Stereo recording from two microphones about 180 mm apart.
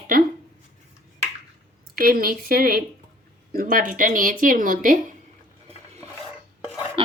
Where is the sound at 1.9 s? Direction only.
55° right (ahead or behind).